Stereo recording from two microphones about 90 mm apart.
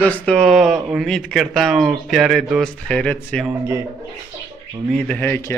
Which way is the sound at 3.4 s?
25° right (ahead or behind).